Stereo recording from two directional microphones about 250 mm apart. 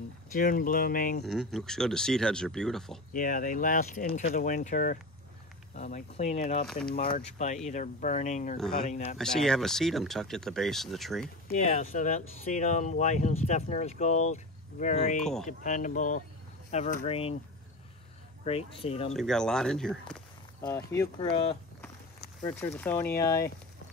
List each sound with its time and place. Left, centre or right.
0.3 s speech: left
1.2 s speech: centre
3.1 s speech: left
8.5 s speech: centre
8.8 s speech: left
9.2 s speech: centre
11.4 s speech: left
18.7 s speech: left
19.1 s speech: centre; by 21.5 s left
22.4 s speech: centre